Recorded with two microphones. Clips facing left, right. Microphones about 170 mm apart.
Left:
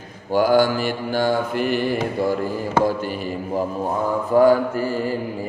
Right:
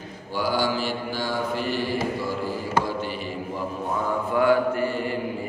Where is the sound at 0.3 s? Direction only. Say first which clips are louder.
Left 8 dB; 50° left (ahead or behind).